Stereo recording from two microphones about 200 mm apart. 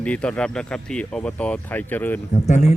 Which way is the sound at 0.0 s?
5° left (ahead or behind).